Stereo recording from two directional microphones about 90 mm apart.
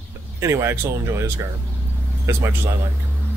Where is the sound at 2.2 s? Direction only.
35° right (ahead or behind).